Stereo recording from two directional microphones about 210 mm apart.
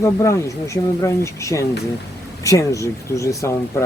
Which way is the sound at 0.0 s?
15° left (ahead or behind).